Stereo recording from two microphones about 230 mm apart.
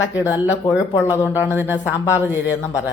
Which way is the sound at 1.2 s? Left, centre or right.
Centre.